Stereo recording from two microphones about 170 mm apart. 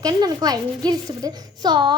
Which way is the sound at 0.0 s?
20° right (ahead or behind).